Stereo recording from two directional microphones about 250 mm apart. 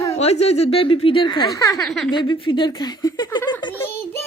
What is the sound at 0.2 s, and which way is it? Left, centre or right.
Speech, left.